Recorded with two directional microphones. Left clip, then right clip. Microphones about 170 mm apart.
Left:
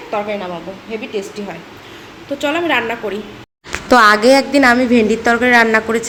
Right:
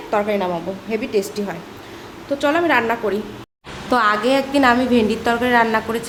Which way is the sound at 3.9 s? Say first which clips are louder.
Left 7 dB; 45° left (ahead or behind).